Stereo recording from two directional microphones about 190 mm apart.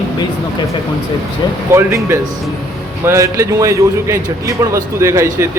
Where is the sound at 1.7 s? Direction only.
15° right (ahead or behind).